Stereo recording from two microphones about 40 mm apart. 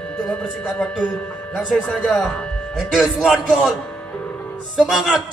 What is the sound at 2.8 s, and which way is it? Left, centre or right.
Speech, centre.